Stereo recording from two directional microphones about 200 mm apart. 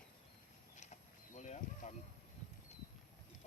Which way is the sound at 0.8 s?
35° left (ahead or behind).